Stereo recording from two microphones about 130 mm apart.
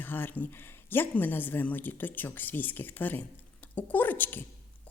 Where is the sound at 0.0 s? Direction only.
15° left (ahead or behind).